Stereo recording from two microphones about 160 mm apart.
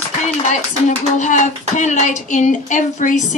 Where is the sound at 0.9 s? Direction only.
50° left (ahead or behind).